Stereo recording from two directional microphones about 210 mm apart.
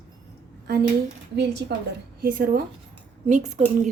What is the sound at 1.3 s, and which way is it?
Speech, 55° right (ahead or behind).